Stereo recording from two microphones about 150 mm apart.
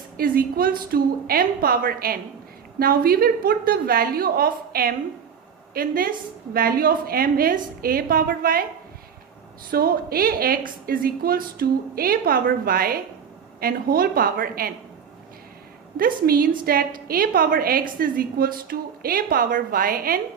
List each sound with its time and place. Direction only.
0.2 s a woman's voice: 75° right (ahead or behind)
9.7 s a woman's voice: 80° right
16.0 s a woman's voice: 75° right (ahead or behind)